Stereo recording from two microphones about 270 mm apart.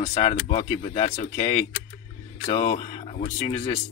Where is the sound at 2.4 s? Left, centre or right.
Left.